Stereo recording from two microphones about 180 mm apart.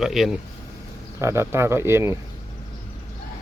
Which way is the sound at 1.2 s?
15° right (ahead or behind).